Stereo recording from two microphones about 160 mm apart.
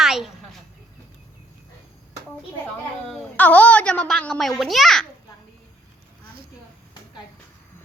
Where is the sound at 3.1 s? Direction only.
5° left (ahead or behind).